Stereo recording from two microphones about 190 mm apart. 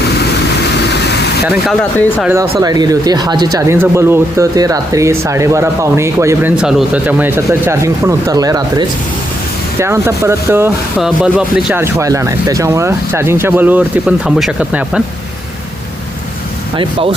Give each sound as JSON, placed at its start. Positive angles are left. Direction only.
{"t": 0.7, "sound": "vehicle", "side_deg": 60}
{"t": 1.5, "sound": "speech", "side_deg": 0}
{"t": 2.2, "sound": "speech", "side_deg": -15}
{"t": 9.7, "sound": "speech", "side_deg": -15}
{"t": 11.0, "sound": "speech", "side_deg": -5}
{"t": 16.7, "sound": "speech", "side_deg": -30}